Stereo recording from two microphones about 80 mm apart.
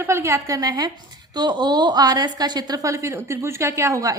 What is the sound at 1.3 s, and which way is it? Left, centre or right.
A woman's voice, right.